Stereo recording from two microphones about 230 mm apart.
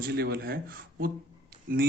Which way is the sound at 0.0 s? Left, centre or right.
Right.